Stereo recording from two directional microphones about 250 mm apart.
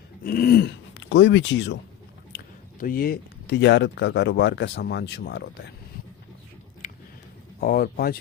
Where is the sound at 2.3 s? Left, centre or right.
Left.